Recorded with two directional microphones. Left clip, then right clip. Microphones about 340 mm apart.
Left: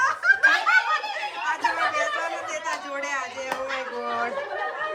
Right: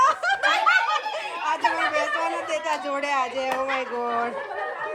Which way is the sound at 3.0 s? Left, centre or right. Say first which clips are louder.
Right 5 dB; centre.